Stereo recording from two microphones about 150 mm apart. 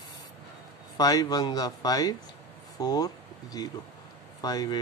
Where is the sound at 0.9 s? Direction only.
25° left (ahead or behind).